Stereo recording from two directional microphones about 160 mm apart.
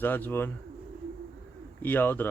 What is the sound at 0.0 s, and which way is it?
Speech, 10° left (ahead or behind).